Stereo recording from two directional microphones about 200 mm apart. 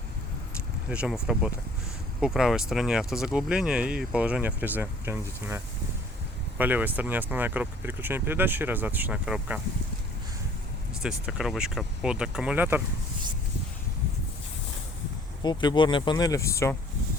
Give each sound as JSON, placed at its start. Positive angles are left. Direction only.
{"t": 0.9, "sound": "speech", "side_deg": -5}
{"t": 11.0, "sound": "speech", "side_deg": -5}
{"t": 15.4, "sound": "speech", "side_deg": 20}